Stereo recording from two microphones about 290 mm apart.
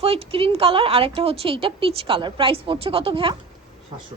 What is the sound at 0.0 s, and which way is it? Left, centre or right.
A woman's voice, centre.